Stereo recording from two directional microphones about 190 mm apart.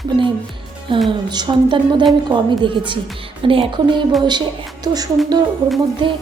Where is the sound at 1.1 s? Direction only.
25° right (ahead or behind).